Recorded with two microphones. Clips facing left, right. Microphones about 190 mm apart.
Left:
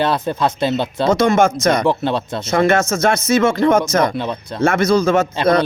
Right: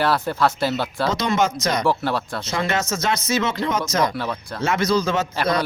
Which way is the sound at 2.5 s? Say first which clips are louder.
Left 9 dB; 50° left (ahead or behind).